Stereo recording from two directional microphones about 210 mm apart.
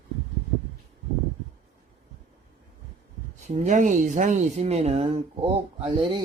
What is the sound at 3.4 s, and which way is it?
Speech, 35° right (ahead or behind).